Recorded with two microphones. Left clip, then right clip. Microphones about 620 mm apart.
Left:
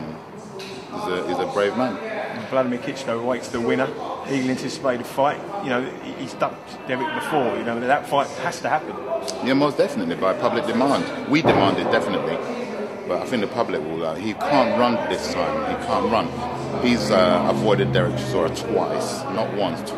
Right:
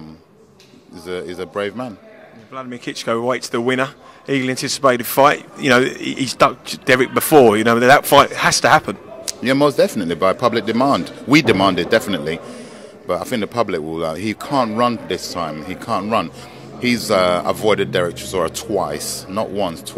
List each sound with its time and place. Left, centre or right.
1.0 s speech: right
3.1 s a man's voice: right